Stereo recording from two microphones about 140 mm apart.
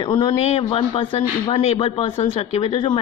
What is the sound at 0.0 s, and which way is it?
Speech, 35° left (ahead or behind).